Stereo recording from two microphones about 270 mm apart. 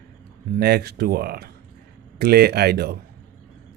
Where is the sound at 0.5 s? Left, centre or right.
Right.